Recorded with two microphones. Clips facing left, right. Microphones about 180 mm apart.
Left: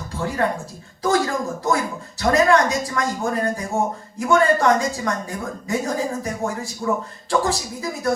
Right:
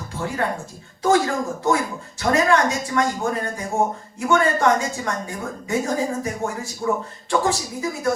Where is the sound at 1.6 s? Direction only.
35° left (ahead or behind).